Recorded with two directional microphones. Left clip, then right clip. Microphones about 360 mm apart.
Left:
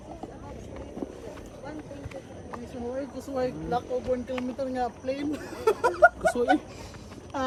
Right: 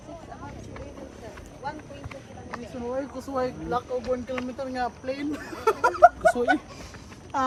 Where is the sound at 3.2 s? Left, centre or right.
Centre.